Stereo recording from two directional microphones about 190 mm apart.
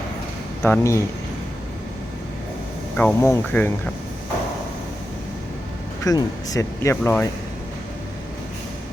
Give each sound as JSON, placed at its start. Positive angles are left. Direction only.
{"t": 0.6, "sound": "speech", "side_deg": 15}
{"t": 3.0, "sound": "speech", "side_deg": 10}
{"t": 6.1, "sound": "speech", "side_deg": 20}